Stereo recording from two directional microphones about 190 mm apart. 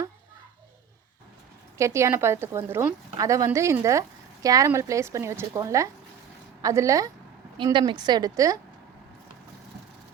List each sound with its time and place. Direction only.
1.8 s a woman's voice: 15° right (ahead or behind)